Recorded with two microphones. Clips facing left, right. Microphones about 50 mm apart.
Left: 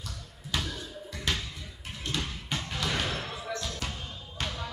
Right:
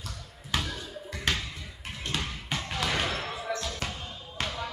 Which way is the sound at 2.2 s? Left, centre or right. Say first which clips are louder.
Right 1 dB; centre.